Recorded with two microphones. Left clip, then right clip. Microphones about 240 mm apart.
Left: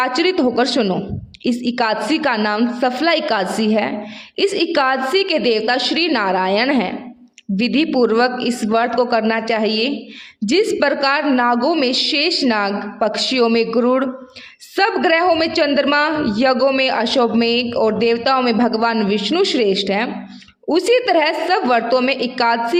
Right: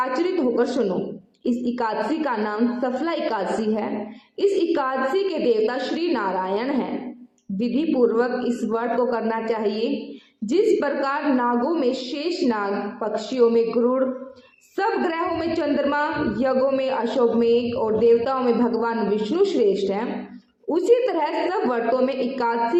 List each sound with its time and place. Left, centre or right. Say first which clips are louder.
0.0 s a man's voice: left 6 dB; left